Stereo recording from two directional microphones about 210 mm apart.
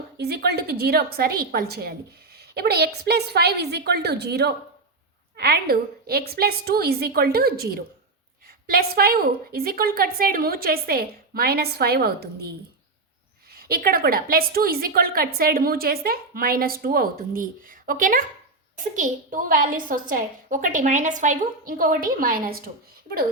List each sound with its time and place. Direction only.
0.2 s a woman's voice: 50° right (ahead or behind)